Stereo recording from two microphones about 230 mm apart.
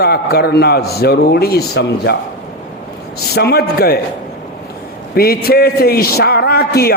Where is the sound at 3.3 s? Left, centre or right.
Left.